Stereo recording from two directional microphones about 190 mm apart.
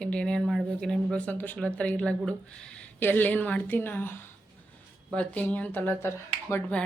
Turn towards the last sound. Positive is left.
turn(degrees=10)  # may be behind; listen again after turning